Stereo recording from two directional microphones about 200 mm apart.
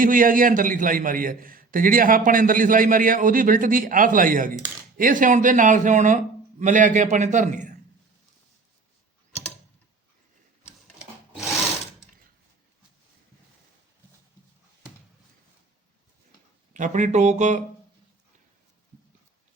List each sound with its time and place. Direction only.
0.0 s a man's voice: 45° right (ahead or behind)
16.7 s speech: 40° right (ahead or behind)